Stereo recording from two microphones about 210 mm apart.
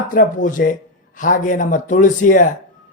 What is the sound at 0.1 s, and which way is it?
Speech, 40° left (ahead or behind).